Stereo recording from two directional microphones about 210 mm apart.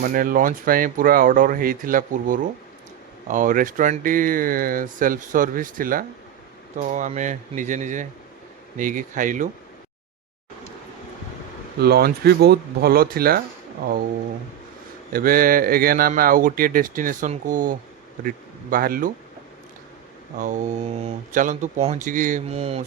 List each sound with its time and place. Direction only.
0.0 s speech: 40° right (ahead or behind)
11.8 s speech: 50° right (ahead or behind)
15.1 s speech: 45° right (ahead or behind)
20.4 s speech: 35° right (ahead or behind)